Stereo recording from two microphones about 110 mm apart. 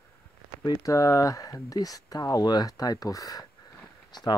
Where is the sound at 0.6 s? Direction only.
35° left (ahead or behind).